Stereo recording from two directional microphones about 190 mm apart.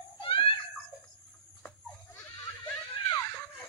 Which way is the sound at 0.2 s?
25° left (ahead or behind).